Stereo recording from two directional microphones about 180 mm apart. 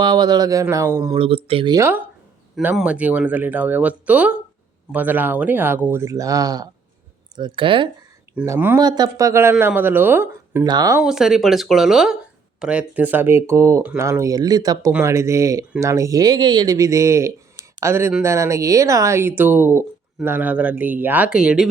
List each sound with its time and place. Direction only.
0.0 s speech: 25° right (ahead or behind)
1.2 s speech: 30° right (ahead or behind)
2.6 s speech: 10° right (ahead or behind); by 7.9 s 30° right (ahead or behind)
8.4 s speech: 10° right (ahead or behind)
11.0 s speech: 5° right (ahead or behind)